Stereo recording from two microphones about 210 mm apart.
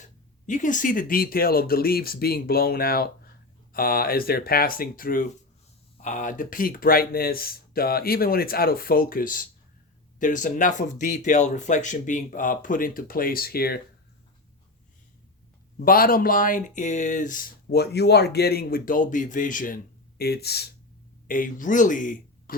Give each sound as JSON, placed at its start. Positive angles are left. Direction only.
{"t": 0.4, "sound": "speech", "side_deg": 35}
{"t": 15.8, "sound": "speech", "side_deg": 45}